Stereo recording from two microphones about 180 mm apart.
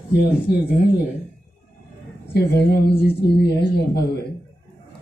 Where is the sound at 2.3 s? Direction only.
65° left (ahead or behind).